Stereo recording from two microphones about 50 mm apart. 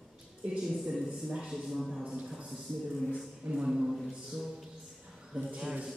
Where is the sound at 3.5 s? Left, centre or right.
Centre.